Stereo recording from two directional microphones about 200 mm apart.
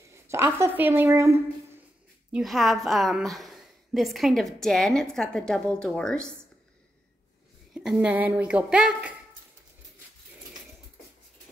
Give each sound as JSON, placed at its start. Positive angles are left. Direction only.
{"t": 0.1, "sound": "speech", "side_deg": -15}
{"t": 2.3, "sound": "a woman's voice", "side_deg": 0}
{"t": 7.7, "sound": "a woman's voice", "side_deg": -5}